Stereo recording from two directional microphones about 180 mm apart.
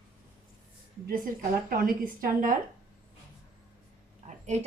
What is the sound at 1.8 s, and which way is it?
Speech, 50° right (ahead or behind).